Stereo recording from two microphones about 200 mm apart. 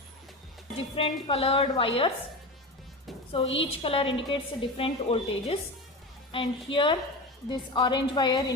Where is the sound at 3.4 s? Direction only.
70° left (ahead or behind).